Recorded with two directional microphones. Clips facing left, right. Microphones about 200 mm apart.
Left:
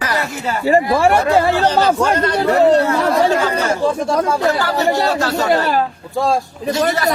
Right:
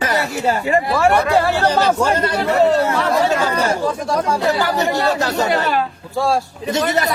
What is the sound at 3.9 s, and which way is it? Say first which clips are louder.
Speech: left 2 dB; 25° left (ahead or behind).